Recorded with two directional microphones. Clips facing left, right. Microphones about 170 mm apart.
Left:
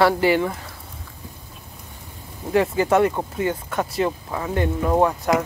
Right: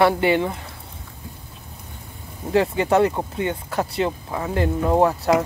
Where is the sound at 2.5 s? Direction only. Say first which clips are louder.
Even; 25° right (ahead or behind).